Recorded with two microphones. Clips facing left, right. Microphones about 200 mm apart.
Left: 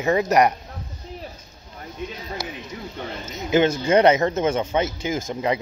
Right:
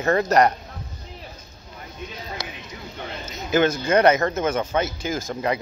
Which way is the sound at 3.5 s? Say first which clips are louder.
Left 1 dB; 20° left (ahead or behind).